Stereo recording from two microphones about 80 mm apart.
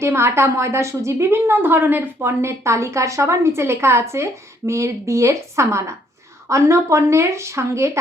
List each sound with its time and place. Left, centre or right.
0.0 s a woman's voice: right